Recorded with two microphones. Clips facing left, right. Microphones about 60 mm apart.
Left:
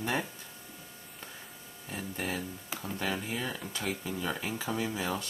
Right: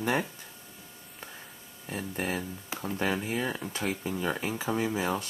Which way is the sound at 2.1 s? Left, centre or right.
Right.